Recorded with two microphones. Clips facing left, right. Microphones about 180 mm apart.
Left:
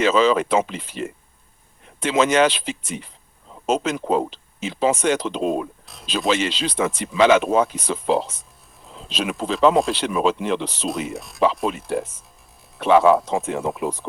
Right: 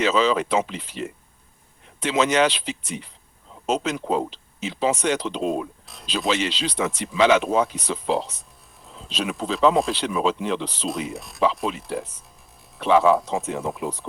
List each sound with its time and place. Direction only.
0.0 s speech: 50° left (ahead or behind)
5.8 s a sound: centre (ahead or behind)
6.1 s speech: 50° left (ahead or behind)
9.0 s speech: 90° left
9.5 s speech: 55° left (ahead or behind)
10.8 s speech: centre (ahead or behind)
11.7 s speech: 50° left (ahead or behind); by 14.1 s 75° left (ahead or behind)